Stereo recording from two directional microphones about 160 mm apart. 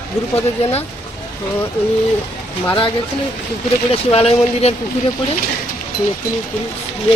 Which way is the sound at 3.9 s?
35° left (ahead or behind).